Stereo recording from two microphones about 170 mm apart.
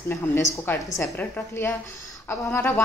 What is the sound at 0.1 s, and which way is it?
A woman's voice, 15° left (ahead or behind).